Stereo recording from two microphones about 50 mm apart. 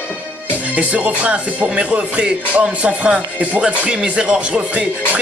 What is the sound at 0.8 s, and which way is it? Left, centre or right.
Speech, right.